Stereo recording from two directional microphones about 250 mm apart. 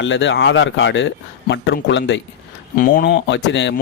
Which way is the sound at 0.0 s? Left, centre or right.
Left.